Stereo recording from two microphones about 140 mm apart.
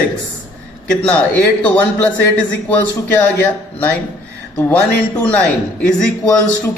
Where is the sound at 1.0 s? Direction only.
10° left (ahead or behind).